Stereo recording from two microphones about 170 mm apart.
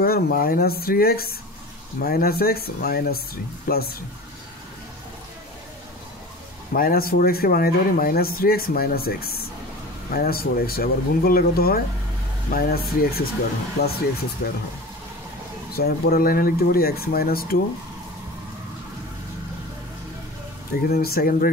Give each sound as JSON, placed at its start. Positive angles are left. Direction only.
{"t": 0.0, "sound": "speech", "side_deg": 60}
{"t": 6.7, "sound": "speech", "side_deg": 60}
{"t": 13.8, "sound": "speech", "side_deg": 75}
{"t": 15.7, "sound": "speech", "side_deg": 65}
{"t": 20.9, "sound": "speech", "side_deg": 65}